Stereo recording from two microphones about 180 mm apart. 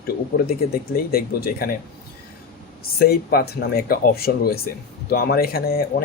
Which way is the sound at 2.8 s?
60° left (ahead or behind).